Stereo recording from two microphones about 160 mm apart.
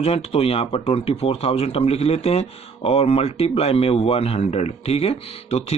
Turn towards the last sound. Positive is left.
turn(degrees=40)  # may be behind; listen again after turning